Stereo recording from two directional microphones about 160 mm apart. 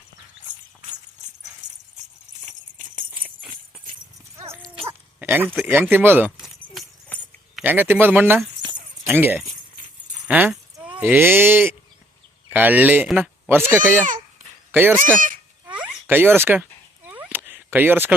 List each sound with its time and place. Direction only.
2.7 s horse: 55° right (ahead or behind)
4.9 s dog: 15° right (ahead or behind)
5.6 s speech: 15° right (ahead or behind)
7.5 s speech: 10° right (ahead or behind)
15.6 s a sound: 10° right (ahead or behind)
17.1 s cat: 10° right (ahead or behind)